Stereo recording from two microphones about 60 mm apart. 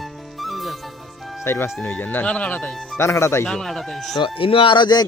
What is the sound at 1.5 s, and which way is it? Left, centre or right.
Speech, left.